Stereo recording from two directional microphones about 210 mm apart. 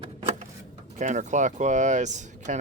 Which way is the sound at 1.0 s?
35° right (ahead or behind).